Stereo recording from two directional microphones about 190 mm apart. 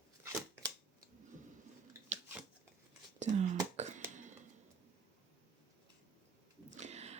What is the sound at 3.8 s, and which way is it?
Throat clearing, 40° right (ahead or behind).